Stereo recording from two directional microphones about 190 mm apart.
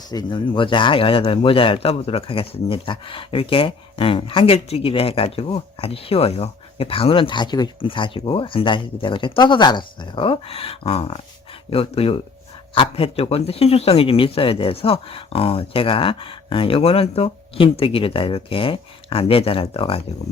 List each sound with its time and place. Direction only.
0.1 s a man's voice: 20° left (ahead or behind)